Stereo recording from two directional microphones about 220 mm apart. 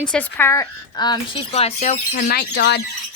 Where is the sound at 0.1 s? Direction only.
10° left (ahead or behind).